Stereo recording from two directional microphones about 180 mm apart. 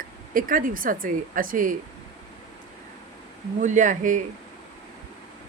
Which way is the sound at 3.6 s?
45° right (ahead or behind).